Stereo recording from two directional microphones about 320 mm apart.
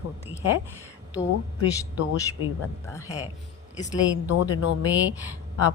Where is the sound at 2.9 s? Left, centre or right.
Centre.